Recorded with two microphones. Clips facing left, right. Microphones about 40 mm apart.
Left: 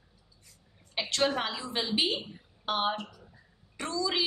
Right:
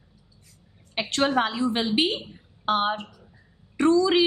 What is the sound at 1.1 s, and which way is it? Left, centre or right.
A woman's voice, right.